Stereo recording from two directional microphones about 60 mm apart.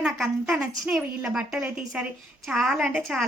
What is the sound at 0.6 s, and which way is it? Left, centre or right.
A woman's voice, centre.